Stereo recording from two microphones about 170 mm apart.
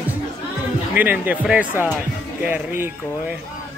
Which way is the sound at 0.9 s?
10° right (ahead or behind).